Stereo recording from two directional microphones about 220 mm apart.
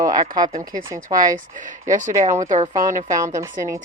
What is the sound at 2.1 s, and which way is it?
A woman's voice, 15° right (ahead or behind).